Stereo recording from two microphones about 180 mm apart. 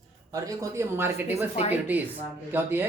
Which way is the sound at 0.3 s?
20° right (ahead or behind).